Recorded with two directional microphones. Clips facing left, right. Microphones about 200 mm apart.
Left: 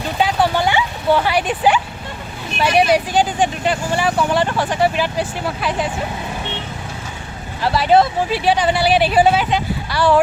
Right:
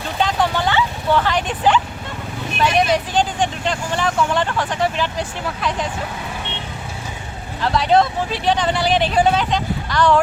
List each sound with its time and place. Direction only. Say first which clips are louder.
0.2 s a sound: left 2 dB; 10° left (ahead or behind)
2.6 s speech: left 3 dB; 10° left (ahead or behind)
7.6 s speech: left 2 dB; 5° left (ahead or behind)